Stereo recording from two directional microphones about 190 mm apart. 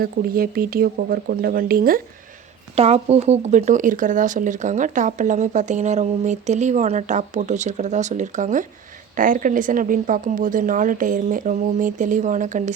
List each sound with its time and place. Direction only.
0.0 s a woman's voice: 50° right (ahead or behind)
2.7 s a woman's voice: 35° right (ahead or behind)